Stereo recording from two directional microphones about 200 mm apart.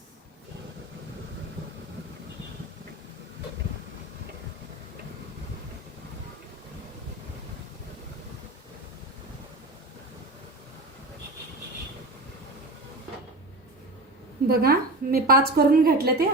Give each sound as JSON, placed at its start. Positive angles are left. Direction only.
{"t": 14.4, "sound": "a woman's voice", "side_deg": -50}